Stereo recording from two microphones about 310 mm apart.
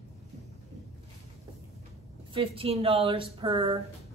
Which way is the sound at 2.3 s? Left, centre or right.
Centre.